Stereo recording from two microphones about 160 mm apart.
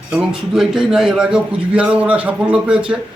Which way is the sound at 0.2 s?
5° right (ahead or behind).